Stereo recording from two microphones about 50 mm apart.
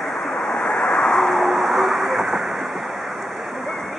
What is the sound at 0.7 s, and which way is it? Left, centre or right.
Vehicle, left.